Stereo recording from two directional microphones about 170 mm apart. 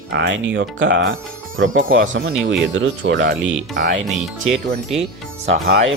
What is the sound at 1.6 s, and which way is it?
Speech, 50° right (ahead or behind).